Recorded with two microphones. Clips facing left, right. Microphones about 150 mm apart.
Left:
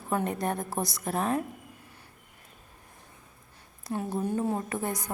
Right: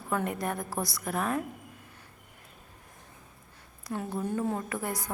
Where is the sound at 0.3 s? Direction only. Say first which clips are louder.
Left 2 dB; 25° left (ahead or behind).